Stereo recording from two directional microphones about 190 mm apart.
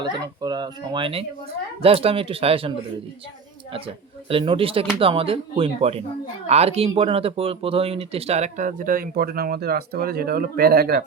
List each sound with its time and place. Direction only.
0.4 s speech: 20° right (ahead or behind); by 11.0 s 55° right (ahead or behind)